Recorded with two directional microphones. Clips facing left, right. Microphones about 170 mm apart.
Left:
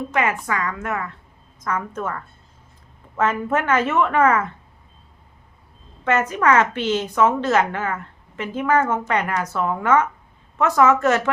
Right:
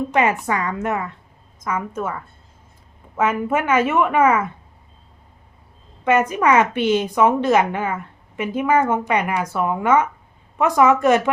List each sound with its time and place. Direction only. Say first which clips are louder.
0.1 s a woman's voice: right 2 dB; 25° right (ahead or behind)
1.6 s a woman's voice: right 1 dB; 10° right (ahead or behind)
6.1 s a woman's voice: right 2 dB; 10° right (ahead or behind)